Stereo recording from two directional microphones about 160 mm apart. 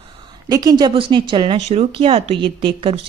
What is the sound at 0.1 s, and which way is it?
A woman's voice, 25° right (ahead or behind).